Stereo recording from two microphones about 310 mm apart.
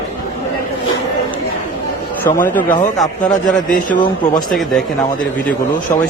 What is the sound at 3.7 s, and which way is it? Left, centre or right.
Speech, left.